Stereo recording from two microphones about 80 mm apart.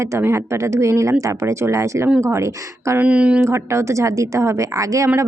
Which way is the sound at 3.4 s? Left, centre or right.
Right.